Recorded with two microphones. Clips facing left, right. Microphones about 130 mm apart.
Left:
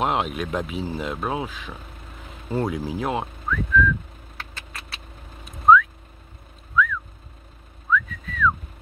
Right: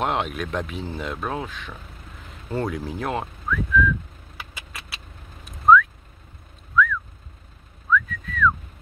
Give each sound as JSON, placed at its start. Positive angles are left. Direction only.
{"t": 0.0, "sound": "speech", "side_deg": 5}
{"t": 4.4, "sound": "vehicle", "side_deg": -10}
{"t": 6.8, "sound": "whistling", "side_deg": 0}